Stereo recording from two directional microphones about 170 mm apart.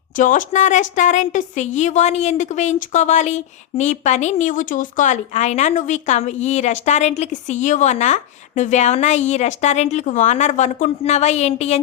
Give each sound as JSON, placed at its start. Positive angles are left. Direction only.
{"t": 0.2, "sound": "a woman's voice", "side_deg": 50}